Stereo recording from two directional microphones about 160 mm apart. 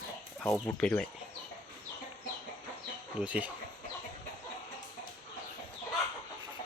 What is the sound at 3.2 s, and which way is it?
Speech, 10° right (ahead or behind).